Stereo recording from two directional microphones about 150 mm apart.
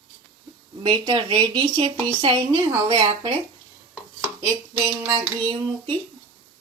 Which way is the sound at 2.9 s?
30° right (ahead or behind).